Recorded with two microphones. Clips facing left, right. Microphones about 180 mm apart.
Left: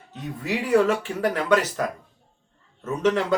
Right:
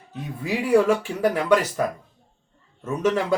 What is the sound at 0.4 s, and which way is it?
Speech, 10° right (ahead or behind).